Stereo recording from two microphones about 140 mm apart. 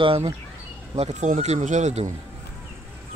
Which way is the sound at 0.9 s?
55° right (ahead or behind).